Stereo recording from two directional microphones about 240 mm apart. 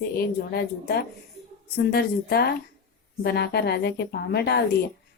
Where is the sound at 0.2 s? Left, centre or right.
Left.